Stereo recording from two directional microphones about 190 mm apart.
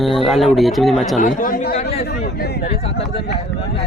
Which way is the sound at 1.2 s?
45° left (ahead or behind).